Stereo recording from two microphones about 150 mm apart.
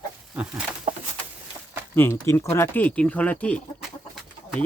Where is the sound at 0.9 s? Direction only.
45° right (ahead or behind).